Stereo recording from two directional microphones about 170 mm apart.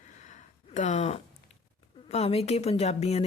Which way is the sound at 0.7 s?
45° left (ahead or behind).